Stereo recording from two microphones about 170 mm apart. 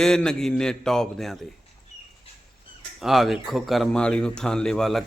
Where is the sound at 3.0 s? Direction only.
Centre (ahead or behind).